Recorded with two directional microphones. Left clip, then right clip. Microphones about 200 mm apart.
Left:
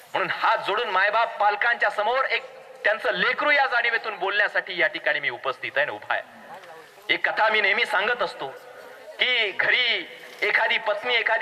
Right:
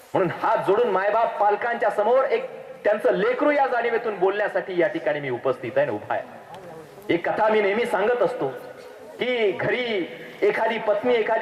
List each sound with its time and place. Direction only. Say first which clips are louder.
0.1 s a man's voice: right 1 dB; 10° left (ahead or behind)